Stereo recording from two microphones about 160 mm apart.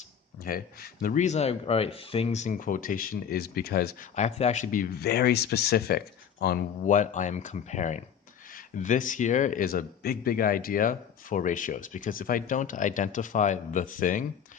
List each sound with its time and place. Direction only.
0.4 s speech: 65° left (ahead or behind)
4.1 s speech: 45° left (ahead or behind)